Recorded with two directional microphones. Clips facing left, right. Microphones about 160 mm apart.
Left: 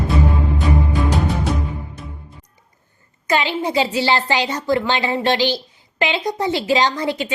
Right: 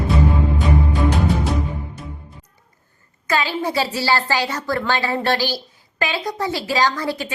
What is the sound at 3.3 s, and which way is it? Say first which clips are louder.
A woman's voice: left 2 dB; 20° left (ahead or behind).